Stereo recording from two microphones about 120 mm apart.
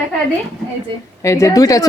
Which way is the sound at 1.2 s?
25° left (ahead or behind).